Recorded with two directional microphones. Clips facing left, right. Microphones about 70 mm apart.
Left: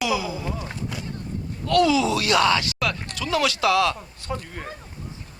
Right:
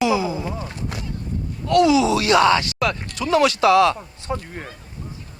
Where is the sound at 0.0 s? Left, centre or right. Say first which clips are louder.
Right 5 dB; right.